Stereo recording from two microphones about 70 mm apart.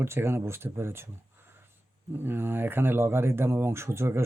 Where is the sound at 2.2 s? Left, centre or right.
Right.